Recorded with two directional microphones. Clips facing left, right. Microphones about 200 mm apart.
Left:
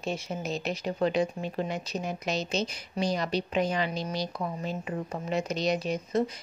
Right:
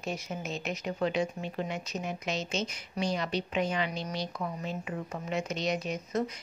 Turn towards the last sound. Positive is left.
turn(degrees=30)  # may be behind; listen again after turning